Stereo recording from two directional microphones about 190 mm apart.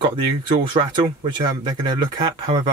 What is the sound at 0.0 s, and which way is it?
Speech, 25° right (ahead or behind).